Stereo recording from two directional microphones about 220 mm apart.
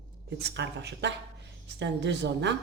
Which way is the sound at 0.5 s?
50° right (ahead or behind).